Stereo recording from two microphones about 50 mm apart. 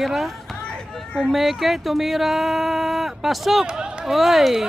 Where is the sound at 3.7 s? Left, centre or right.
Centre.